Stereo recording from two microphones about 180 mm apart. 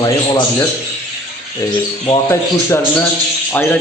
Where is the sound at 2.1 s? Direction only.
15° left (ahead or behind).